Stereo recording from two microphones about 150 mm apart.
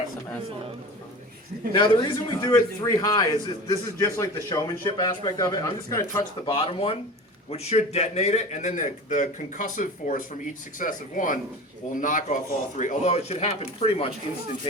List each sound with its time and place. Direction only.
1.7 s a man's voice: 30° left (ahead or behind)
6.4 s a man's voice: 35° left (ahead or behind)